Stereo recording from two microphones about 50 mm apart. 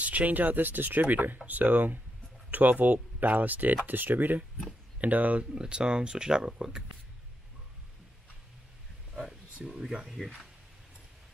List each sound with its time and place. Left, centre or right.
0.0 s speech: right; by 6.8 s centre
9.1 s a sound: centre
9.7 s speech: centre